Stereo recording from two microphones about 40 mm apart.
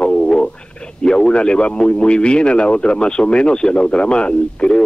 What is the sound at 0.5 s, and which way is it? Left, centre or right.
A man's voice, left.